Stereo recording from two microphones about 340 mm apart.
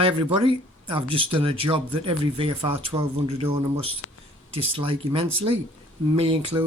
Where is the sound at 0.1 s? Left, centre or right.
Centre.